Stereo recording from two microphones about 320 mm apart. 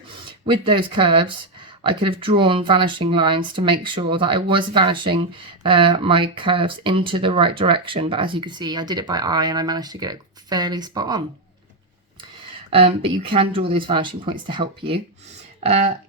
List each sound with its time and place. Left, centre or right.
0.3 s speech: centre
12.7 s speech: centre